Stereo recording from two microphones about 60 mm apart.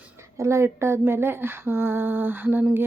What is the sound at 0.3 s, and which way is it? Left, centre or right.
Female singing, right.